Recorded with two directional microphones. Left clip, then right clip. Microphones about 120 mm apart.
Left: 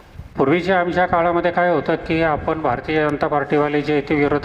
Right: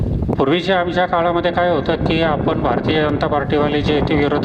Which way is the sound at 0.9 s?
20° right (ahead or behind).